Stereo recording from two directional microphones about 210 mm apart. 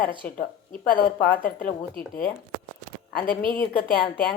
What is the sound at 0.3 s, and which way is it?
Speech, 45° left (ahead or behind).